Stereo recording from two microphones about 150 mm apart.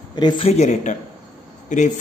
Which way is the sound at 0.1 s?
30° left (ahead or behind).